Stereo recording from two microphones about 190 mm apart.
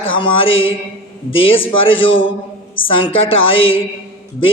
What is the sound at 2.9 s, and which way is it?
Speech, 30° left (ahead or behind).